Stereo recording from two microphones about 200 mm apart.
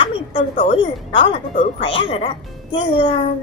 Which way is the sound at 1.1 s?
35° left (ahead or behind).